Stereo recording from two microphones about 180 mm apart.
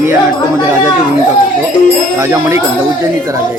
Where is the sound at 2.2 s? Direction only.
15° right (ahead or behind).